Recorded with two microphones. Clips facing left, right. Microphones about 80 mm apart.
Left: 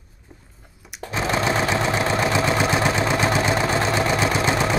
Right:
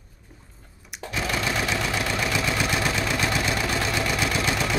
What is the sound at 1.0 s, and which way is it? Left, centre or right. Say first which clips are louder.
Sewing machine: left 5 dB; left.